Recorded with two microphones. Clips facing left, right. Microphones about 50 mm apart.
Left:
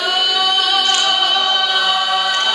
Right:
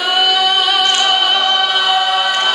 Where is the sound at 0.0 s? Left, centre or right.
Centre.